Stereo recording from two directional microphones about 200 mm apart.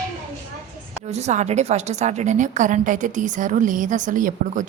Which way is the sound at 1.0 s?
35° right (ahead or behind).